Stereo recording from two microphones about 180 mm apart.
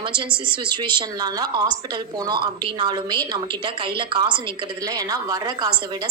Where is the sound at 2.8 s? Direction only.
25° right (ahead or behind).